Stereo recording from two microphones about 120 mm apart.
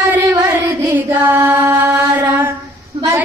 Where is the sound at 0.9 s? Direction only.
15° right (ahead or behind).